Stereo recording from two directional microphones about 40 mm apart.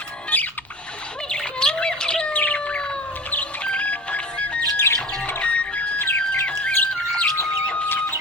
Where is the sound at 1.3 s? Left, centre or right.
Centre.